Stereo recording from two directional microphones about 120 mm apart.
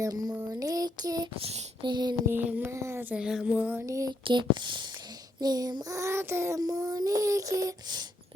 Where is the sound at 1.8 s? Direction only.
40° right (ahead or behind).